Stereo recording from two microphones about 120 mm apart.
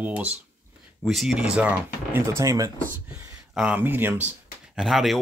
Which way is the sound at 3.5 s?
10° right (ahead or behind).